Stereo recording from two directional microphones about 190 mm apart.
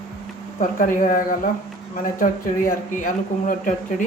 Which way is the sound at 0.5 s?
45° left (ahead or behind).